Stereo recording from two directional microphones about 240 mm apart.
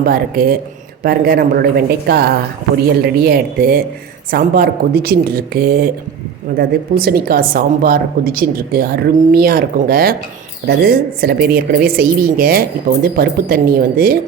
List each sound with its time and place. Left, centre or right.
0.0 s a woman's voice: right